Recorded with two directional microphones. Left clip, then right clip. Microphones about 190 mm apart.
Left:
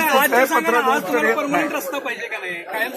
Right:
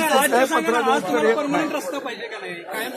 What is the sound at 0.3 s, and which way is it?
Speech, 25° right (ahead or behind).